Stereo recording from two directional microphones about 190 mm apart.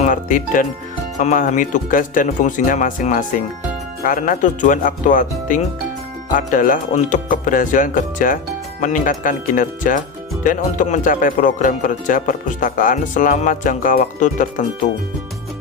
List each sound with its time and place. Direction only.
0.0 s speech: 45° left (ahead or behind)